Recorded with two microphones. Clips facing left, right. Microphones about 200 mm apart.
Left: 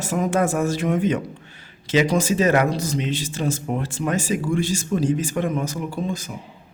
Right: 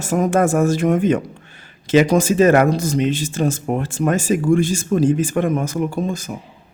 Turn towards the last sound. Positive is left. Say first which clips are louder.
# right 4 dB
turn(degrees=-45)  # may be behind; listen again after turning